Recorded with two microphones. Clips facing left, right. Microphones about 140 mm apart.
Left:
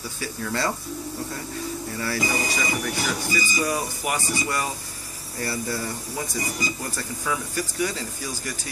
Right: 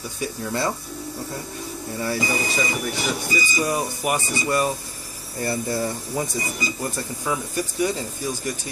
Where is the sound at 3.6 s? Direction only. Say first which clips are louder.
Right 2 dB; 20° right (ahead or behind).